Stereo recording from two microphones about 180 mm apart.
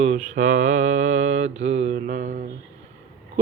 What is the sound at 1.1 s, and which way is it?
Mantra, 90° right.